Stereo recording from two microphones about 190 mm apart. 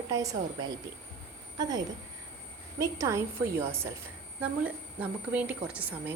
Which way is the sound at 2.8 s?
15° right (ahead or behind).